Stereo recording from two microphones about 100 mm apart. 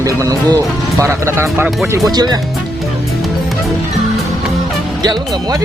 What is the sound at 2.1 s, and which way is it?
Speech, 40° right (ahead or behind).